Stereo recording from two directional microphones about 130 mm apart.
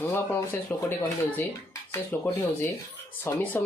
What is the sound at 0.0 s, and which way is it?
Speech, 15° left (ahead or behind).